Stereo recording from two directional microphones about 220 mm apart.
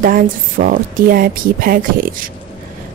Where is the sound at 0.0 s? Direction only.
40° right (ahead or behind).